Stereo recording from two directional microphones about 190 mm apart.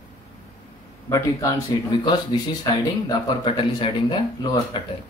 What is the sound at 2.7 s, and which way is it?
Speech, 20° left (ahead or behind).